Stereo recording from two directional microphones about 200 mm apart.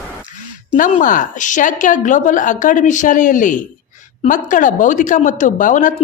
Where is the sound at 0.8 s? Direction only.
40° left (ahead or behind).